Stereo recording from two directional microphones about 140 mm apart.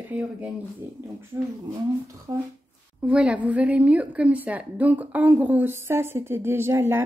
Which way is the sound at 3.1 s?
10° right (ahead or behind).